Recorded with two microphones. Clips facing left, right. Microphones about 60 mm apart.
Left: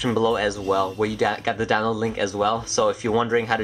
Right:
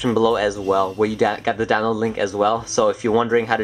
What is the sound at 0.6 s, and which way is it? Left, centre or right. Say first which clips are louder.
Speech: right 4 dB; centre.